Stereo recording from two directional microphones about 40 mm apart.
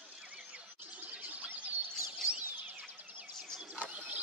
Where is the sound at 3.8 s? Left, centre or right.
Right.